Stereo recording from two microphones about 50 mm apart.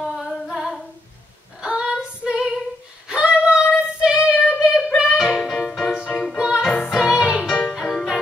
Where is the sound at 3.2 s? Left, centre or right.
Centre.